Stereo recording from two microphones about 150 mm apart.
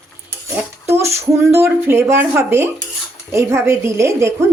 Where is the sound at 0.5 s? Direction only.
15° right (ahead or behind).